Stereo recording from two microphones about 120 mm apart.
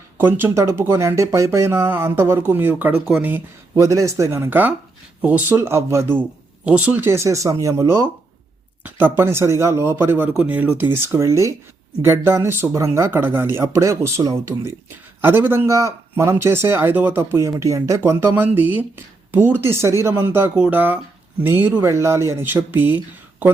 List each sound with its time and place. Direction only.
0.2 s speech: 15° right (ahead or behind)
3.8 s speech: 25° right (ahead or behind)
5.5 s speech: 25° right (ahead or behind)